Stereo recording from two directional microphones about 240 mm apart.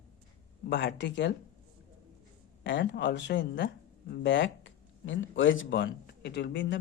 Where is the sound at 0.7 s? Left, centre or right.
Left.